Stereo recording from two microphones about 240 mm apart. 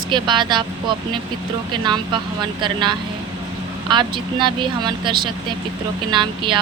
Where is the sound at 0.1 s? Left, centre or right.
Centre.